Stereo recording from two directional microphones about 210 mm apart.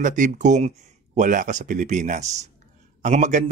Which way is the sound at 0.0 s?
35° right (ahead or behind).